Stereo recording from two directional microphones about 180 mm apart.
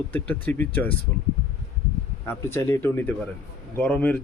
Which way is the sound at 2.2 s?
15° left (ahead or behind).